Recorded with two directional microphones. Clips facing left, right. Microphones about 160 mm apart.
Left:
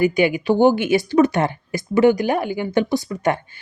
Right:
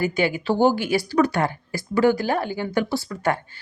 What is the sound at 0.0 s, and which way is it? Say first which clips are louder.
Speech: left 5 dB; 15° left (ahead or behind).